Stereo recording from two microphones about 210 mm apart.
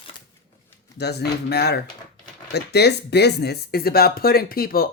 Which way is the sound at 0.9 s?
50° left (ahead or behind).